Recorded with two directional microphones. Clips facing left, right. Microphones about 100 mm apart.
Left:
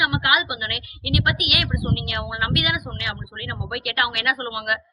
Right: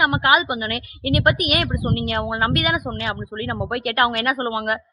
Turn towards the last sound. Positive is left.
turn(degrees=-35)  # may be behind; listen again after turning